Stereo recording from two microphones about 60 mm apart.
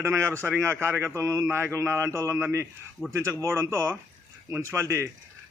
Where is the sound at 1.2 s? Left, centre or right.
Right.